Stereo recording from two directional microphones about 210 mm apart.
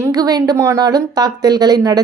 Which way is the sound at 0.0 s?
20° right (ahead or behind).